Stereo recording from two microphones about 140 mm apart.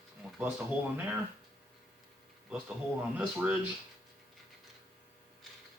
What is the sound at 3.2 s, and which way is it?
Speech, 15° right (ahead or behind).